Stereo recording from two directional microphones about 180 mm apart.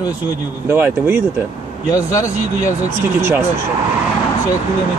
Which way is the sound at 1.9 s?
20° left (ahead or behind).